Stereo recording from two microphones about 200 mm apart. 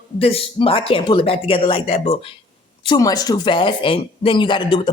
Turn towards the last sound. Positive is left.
turn(degrees=25)  # may be behind; listen again after turning